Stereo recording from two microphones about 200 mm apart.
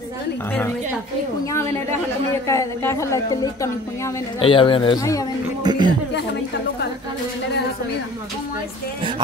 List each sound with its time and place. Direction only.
1.4 s a woman's voice: 15° left (ahead or behind)
4.4 s a man's voice: 25° left (ahead or behind)
5.6 s speech: 20° right (ahead or behind)